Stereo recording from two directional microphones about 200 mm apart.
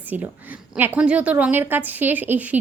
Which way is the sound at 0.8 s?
5° right (ahead or behind).